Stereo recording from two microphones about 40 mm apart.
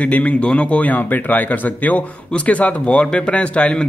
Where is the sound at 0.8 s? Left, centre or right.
Left.